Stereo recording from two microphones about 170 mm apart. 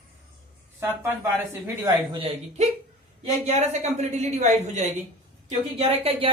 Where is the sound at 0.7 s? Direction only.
15° right (ahead or behind).